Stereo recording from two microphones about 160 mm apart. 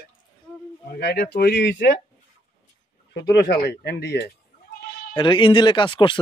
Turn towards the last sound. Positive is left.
turn(degrees=30)  # may be behind; listen again after turning